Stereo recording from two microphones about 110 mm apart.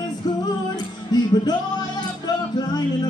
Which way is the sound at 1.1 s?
40° left (ahead or behind).